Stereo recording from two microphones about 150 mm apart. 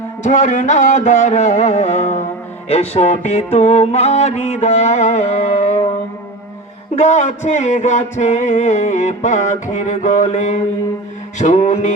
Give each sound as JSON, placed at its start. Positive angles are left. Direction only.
{"t": 0.3, "sound": "music", "side_deg": 55}
{"t": 6.9, "sound": "music", "side_deg": 50}